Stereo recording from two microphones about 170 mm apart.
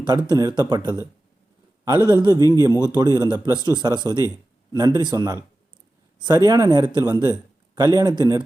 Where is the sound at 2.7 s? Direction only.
15° left (ahead or behind).